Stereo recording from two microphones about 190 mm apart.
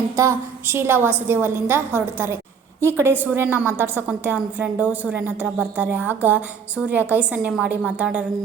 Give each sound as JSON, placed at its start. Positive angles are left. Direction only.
{"t": 0.2, "sound": "a woman's voice", "side_deg": -15}